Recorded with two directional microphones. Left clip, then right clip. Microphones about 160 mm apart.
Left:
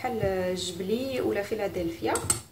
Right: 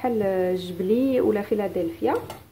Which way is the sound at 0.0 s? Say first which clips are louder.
Right 5 dB; 40° right (ahead or behind).